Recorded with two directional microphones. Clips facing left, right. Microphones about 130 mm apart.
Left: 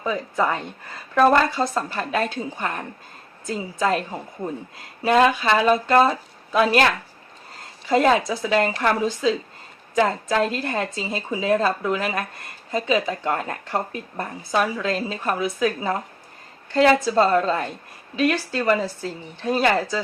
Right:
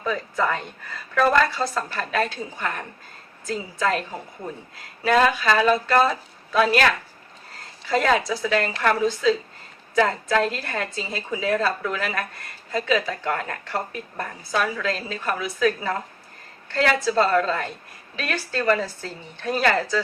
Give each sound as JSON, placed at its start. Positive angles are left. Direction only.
{"t": 0.0, "sound": "a woman's voice", "side_deg": 20}
{"t": 5.0, "sound": "a woman's voice", "side_deg": 25}
{"t": 7.9, "sound": "a woman's voice", "side_deg": 25}